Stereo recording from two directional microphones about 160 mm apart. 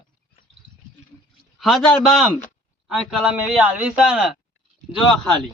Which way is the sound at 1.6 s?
5° left (ahead or behind).